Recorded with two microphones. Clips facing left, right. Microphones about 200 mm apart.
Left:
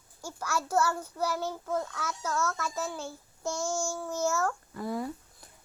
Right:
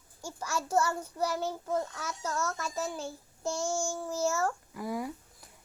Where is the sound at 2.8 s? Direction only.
15° right (ahead or behind).